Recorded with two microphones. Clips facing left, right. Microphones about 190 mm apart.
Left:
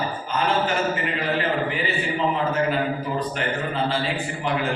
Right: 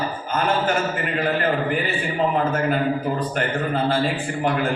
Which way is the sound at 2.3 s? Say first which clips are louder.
Right 2 dB; 50° right (ahead or behind).